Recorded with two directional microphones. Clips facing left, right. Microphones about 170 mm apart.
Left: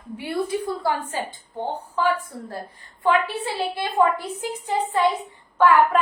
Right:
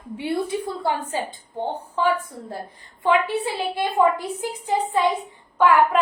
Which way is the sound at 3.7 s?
15° right (ahead or behind).